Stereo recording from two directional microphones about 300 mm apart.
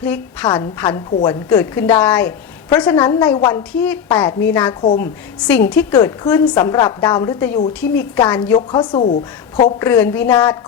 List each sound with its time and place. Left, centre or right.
0.0 s a woman's voice: centre
4.8 s a woman's voice: left
5.7 s a woman's voice: centre